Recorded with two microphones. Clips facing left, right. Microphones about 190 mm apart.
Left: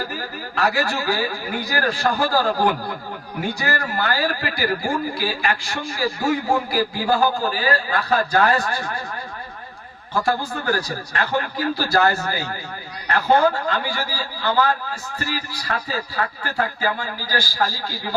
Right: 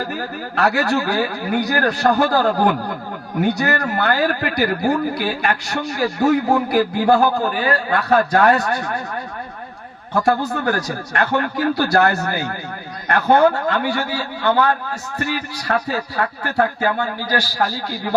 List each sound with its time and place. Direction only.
0.5 s a man's voice: 65° right (ahead or behind)
3.6 s a man's voice: 65° right (ahead or behind)
10.2 s a man's voice: 65° right (ahead or behind)